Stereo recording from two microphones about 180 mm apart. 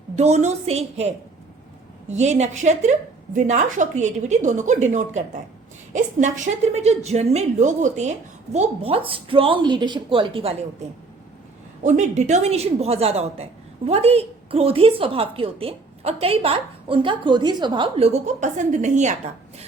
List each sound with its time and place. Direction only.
0.2 s a woman's voice: 40° right (ahead or behind)
11.8 s a woman's voice: 40° right (ahead or behind)